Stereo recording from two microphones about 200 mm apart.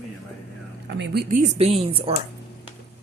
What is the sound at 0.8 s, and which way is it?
Speech, 55° right (ahead or behind).